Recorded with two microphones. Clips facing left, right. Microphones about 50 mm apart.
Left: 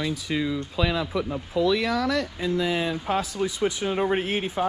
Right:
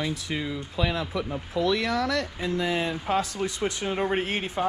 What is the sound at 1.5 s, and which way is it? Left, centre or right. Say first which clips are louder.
Speech: left 2 dB; right.